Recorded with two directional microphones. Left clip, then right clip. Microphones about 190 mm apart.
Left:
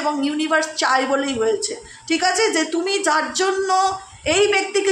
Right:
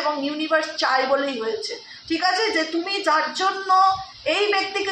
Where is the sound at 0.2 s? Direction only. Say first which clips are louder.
Left 2 dB; 50° left (ahead or behind).